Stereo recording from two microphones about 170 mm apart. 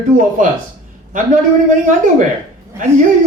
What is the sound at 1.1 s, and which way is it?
Speech, 50° right (ahead or behind).